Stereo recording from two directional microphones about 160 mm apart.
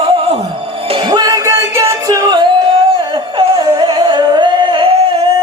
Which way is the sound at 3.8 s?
35° right (ahead or behind).